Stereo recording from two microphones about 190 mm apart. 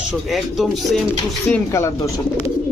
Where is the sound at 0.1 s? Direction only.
Centre (ahead or behind).